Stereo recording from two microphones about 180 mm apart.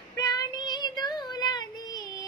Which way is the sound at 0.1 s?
20° left (ahead or behind).